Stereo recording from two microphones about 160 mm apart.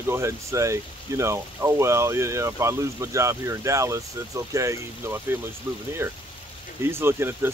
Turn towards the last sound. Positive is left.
turn(degrees=-15)  # may be behind; listen again after turning